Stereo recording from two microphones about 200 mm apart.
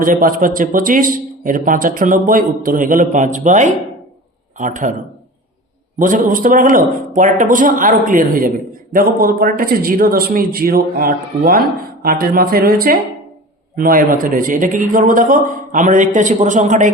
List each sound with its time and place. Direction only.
0.0 s speech: 45° right (ahead or behind)
6.0 s speech: 40° right (ahead or behind)